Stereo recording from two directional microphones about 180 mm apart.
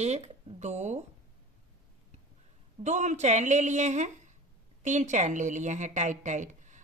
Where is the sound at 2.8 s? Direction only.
40° right (ahead or behind).